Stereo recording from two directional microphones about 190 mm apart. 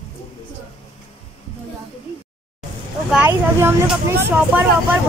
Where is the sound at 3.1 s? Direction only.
10° right (ahead or behind).